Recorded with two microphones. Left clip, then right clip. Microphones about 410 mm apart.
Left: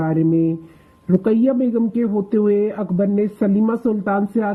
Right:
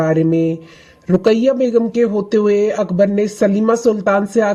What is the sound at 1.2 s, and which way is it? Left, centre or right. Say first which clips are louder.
A man's voice: right 5 dB; centre.